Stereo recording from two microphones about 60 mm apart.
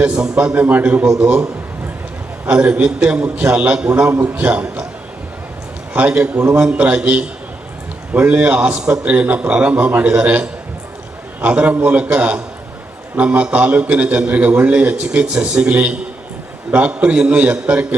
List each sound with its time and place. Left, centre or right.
0.0 s a man's voice: centre
2.5 s a man's voice: right
5.9 s a man's voice: right